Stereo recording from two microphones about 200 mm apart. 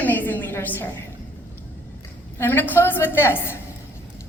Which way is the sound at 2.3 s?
10° left (ahead or behind).